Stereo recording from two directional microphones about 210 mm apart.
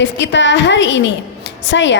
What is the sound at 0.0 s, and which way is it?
A woman's voice, 60° left (ahead or behind).